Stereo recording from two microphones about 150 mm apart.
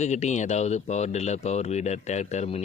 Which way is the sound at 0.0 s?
50° left (ahead or behind).